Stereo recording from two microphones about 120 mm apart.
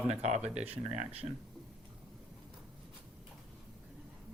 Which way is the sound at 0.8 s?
65° right (ahead or behind).